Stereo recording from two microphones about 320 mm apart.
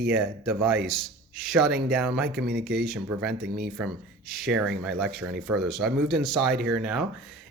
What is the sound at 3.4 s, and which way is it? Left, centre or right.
Speech, right.